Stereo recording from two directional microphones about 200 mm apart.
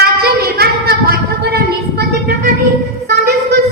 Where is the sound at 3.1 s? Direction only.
55° right (ahead or behind).